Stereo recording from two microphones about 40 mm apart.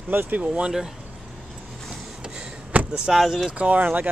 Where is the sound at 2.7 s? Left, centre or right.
Right.